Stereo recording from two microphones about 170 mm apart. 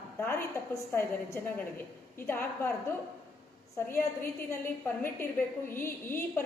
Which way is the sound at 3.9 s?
15° left (ahead or behind).